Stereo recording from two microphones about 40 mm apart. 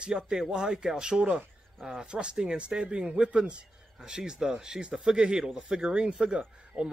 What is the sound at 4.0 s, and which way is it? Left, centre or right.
Speech, centre.